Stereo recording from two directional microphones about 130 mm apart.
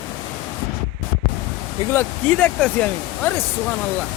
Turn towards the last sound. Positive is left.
turn(degrees=10)  # may be behind; listen again after turning